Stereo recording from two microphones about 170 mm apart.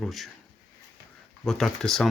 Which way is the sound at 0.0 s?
Centre (ahead or behind).